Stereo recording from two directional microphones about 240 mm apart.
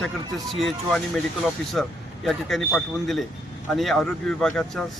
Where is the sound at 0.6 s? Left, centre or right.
Centre.